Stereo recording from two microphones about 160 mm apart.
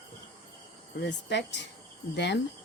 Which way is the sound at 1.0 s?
90° left.